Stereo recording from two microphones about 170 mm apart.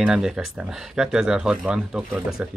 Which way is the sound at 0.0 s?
5° right (ahead or behind).